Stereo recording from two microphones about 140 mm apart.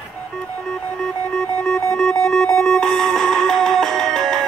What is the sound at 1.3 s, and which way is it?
Music, 5° left (ahead or behind).